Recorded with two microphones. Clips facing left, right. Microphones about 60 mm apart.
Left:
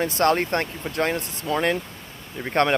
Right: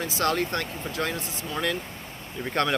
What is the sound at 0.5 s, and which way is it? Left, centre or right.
Speech, left.